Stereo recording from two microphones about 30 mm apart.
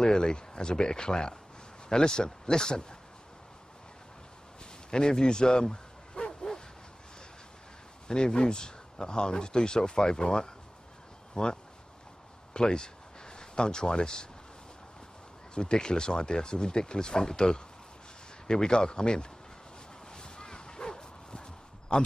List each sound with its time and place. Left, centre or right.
0.0 s speech: left
4.9 s bow-wow: left
8.1 s speech: left
15.5 s speech: left
20.1 s a sound: left